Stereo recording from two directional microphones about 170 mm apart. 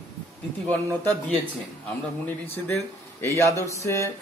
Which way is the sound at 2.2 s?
10° left (ahead or behind).